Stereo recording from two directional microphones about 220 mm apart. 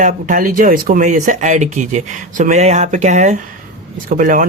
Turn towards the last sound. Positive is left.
turn(degrees=-40)  # may be behind; listen again after turning